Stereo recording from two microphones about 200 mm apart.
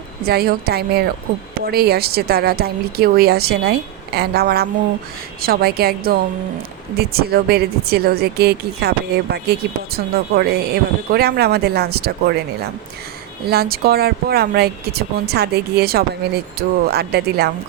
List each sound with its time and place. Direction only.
0.3 s speech: 50° right (ahead or behind)
13.4 s speech: 50° right (ahead or behind)